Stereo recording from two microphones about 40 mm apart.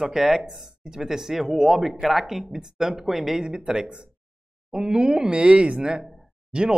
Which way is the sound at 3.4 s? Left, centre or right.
Right.